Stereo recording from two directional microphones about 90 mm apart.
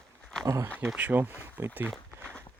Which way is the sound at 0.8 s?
15° right (ahead or behind).